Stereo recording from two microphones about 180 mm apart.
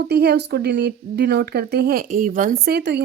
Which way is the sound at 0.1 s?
65° right (ahead or behind).